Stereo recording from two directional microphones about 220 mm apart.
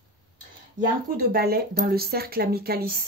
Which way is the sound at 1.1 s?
45° right (ahead or behind).